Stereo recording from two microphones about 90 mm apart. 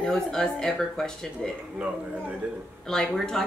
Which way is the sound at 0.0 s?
5° left (ahead or behind).